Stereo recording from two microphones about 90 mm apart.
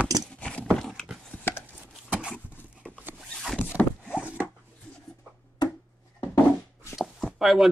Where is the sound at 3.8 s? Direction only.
15° left (ahead or behind).